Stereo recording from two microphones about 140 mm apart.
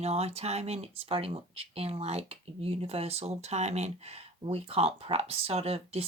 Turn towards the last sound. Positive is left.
turn(degrees=-45)  # may be behind; listen again after turning